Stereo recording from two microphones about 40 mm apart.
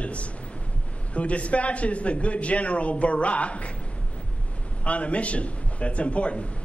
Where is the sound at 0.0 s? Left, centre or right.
Left.